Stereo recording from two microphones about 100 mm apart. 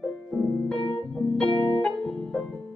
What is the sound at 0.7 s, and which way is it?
Keyboard, 65° left (ahead or behind).